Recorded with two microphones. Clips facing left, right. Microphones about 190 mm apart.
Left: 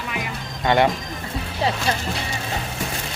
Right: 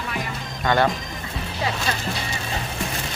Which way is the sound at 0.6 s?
25° left (ahead or behind).